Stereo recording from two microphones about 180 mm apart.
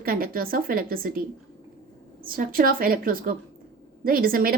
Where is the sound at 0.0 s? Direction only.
55° right (ahead or behind).